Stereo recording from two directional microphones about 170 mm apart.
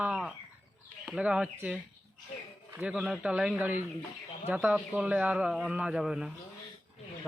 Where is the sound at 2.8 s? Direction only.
Centre (ahead or behind).